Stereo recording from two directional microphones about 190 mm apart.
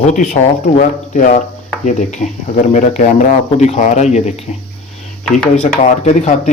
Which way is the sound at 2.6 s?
40° left (ahead or behind).